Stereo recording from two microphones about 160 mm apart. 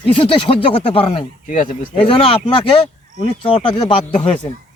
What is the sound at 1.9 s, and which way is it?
Speech, 35° left (ahead or behind).